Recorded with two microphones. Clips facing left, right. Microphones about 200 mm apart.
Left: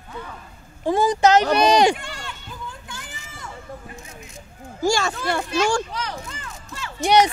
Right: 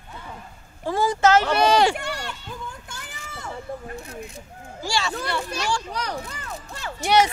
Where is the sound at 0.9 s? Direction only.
20° left (ahead or behind).